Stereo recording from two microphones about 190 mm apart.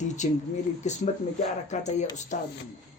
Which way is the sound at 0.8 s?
40° left (ahead or behind).